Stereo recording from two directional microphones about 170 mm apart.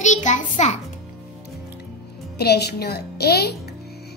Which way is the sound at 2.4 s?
70° left (ahead or behind).